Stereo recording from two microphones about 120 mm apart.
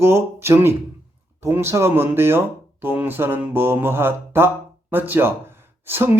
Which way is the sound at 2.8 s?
15° right (ahead or behind).